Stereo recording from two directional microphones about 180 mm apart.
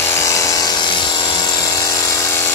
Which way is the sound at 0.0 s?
15° left (ahead or behind).